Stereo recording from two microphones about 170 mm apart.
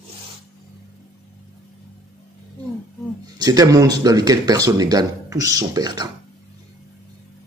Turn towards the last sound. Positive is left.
turn(degrees=-20)  # may be behind; listen again after turning